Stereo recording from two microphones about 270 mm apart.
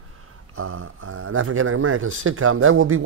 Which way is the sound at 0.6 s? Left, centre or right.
Right.